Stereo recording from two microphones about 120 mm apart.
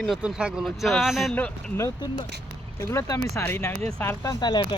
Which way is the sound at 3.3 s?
20° left (ahead or behind).